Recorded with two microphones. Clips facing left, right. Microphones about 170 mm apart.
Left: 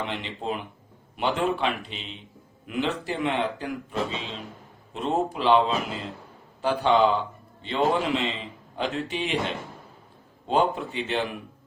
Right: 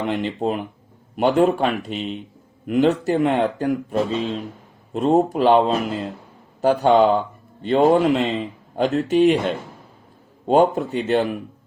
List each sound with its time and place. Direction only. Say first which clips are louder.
0.0 s a man's voice: right 9 dB; 45° right (ahead or behind)